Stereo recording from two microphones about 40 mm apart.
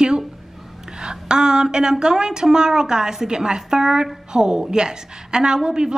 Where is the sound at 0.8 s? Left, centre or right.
Centre.